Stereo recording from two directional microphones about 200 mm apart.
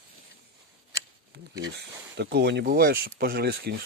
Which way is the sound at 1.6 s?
55° right (ahead or behind).